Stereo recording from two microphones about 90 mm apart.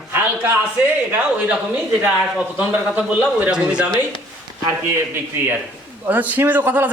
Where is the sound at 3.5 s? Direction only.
10° right (ahead or behind).